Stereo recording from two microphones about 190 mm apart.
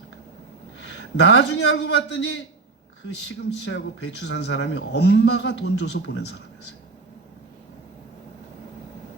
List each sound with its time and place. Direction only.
1.1 s a man's voice: 65° left (ahead or behind)
3.7 s a man's voice: 70° left (ahead or behind)